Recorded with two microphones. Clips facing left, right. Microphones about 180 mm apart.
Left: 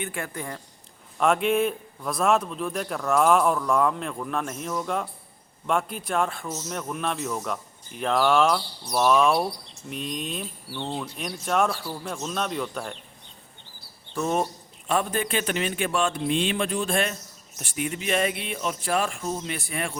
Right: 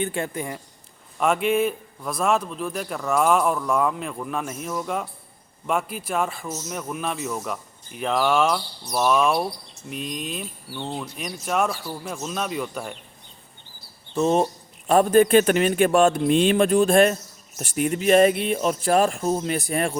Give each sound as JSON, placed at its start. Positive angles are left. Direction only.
{"t": 0.0, "sound": "speech", "side_deg": -25}
{"t": 1.2, "sound": "a man's voice", "side_deg": 0}
{"t": 14.2, "sound": "speech", "side_deg": -25}
{"t": 14.8, "sound": "speech", "side_deg": -45}